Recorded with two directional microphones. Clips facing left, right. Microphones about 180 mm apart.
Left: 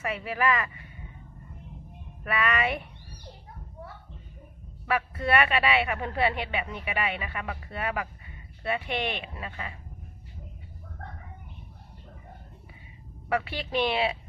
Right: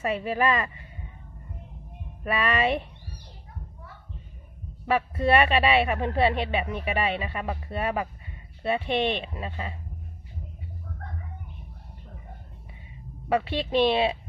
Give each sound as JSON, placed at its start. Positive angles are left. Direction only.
{"t": 0.0, "sound": "speech", "side_deg": -25}
{"t": 2.2, "sound": "speech", "side_deg": -25}
{"t": 4.9, "sound": "speech", "side_deg": -25}
{"t": 13.2, "sound": "speech", "side_deg": -25}